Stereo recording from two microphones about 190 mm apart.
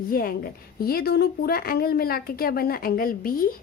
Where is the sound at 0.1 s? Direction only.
50° left (ahead or behind).